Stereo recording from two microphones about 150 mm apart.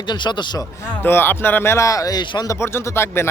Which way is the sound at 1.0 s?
15° left (ahead or behind).